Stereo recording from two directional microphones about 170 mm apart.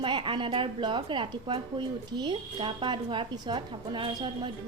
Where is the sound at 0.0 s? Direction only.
30° right (ahead or behind).